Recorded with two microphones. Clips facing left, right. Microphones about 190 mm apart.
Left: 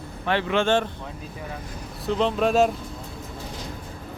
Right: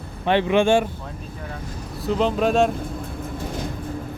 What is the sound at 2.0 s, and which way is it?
Speech, centre (ahead or behind).